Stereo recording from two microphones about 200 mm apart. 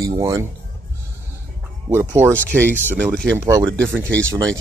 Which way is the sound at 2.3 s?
10° left (ahead or behind).